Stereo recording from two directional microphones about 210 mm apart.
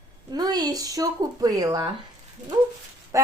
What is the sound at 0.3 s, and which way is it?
Speech, 20° right (ahead or behind).